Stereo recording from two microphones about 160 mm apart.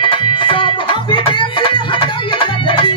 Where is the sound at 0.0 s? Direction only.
35° left (ahead or behind).